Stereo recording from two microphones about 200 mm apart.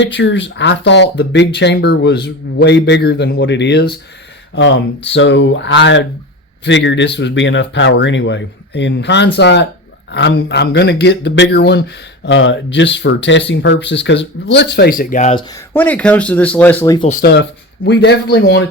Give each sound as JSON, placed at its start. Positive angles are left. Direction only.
{"t": 0.0, "sound": "speech", "side_deg": 65}
{"t": 15.4, "sound": "speech", "side_deg": 15}
{"t": 17.1, "sound": "speech", "side_deg": 45}
{"t": 17.8, "sound": "speech", "side_deg": 55}